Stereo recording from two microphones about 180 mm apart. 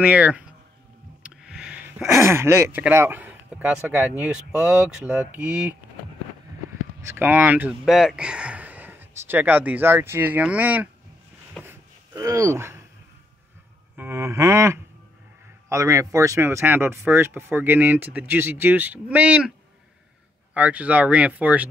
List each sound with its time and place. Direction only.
0.0 s speech: 10° right (ahead or behind)
1.3 s a sound: 5° right (ahead or behind)
2.0 s speech: 15° right (ahead or behind)
7.0 s speech: 15° right (ahead or behind)
11.6 s a sound: 15° right (ahead or behind)
13.9 s speech: 15° right (ahead or behind)
20.5 s speech: 10° right (ahead or behind)